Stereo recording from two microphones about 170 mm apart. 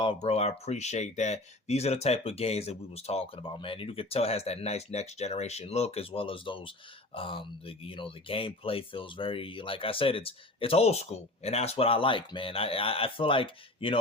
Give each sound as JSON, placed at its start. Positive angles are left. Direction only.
{"t": 0.0, "sound": "speech", "side_deg": 35}